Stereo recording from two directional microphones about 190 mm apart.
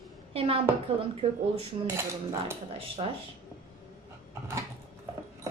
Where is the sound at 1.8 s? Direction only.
15° right (ahead or behind).